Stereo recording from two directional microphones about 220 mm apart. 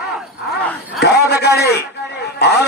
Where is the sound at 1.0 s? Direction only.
50° left (ahead or behind).